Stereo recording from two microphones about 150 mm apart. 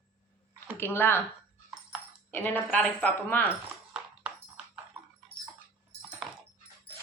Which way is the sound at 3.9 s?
5° right (ahead or behind).